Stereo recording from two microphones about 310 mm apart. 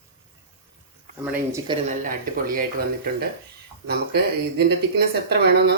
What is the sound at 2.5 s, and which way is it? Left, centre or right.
Speech, right.